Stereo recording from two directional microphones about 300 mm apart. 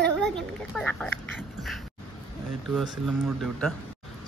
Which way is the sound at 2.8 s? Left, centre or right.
Centre.